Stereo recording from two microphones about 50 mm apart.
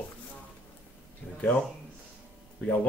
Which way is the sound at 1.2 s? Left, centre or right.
Left.